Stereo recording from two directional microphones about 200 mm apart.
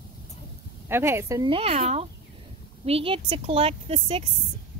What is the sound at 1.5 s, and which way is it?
Speech, 30° right (ahead or behind).